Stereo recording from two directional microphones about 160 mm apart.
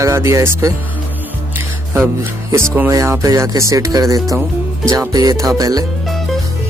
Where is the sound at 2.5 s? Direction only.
15° right (ahead or behind).